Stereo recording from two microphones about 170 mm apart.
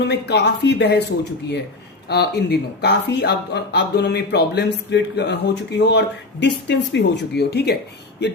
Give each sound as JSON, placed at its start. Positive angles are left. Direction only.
{"t": 0.1, "sound": "speech", "side_deg": 85}
{"t": 2.0, "sound": "speech", "side_deg": 75}